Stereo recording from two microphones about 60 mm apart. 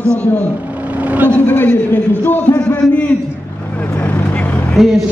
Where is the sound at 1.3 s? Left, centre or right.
Left.